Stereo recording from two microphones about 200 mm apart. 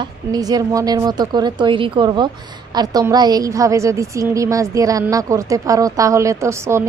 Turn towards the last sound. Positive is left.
turn(degrees=-15)  # may be behind; listen again after turning